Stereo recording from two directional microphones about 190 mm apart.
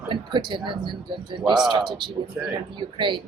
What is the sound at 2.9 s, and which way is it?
Speech, 25° right (ahead or behind).